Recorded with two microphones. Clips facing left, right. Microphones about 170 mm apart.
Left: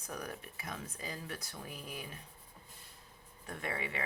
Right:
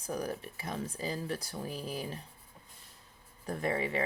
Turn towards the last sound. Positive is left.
turn(degrees=-35)  # may be behind; listen again after turning